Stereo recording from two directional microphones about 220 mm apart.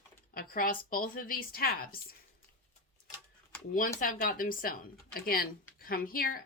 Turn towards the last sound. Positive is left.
turn(degrees=40)  # may be behind; listen again after turning